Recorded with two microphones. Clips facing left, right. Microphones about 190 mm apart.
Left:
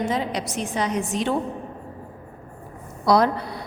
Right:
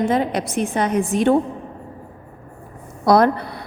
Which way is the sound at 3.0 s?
55° right (ahead or behind).